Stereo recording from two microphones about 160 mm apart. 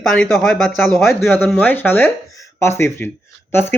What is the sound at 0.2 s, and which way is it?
Speech, centre (ahead or behind).